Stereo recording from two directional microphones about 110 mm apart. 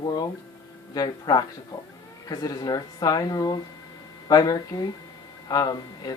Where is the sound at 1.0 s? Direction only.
35° left (ahead or behind).